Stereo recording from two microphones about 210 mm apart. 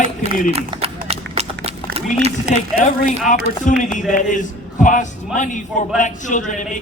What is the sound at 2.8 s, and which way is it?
A man's voice, 35° left (ahead or behind).